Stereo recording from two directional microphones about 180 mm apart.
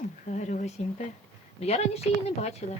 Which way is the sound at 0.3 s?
45° left (ahead or behind).